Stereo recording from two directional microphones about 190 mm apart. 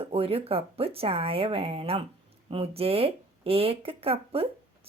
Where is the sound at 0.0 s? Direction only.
30° right (ahead or behind).